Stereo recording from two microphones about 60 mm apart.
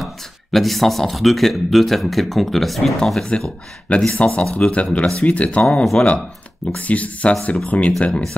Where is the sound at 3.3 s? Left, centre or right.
Centre.